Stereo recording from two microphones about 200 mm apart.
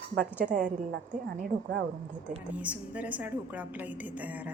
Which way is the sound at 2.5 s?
5° right (ahead or behind).